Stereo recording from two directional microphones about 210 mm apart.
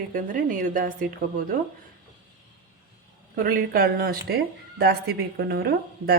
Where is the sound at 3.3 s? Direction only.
40° right (ahead or behind).